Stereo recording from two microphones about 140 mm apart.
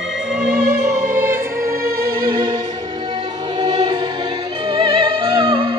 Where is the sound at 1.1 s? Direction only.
15° right (ahead or behind).